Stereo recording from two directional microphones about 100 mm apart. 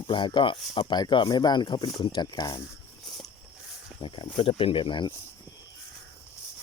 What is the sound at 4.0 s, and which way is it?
Speech, 55° left (ahead or behind).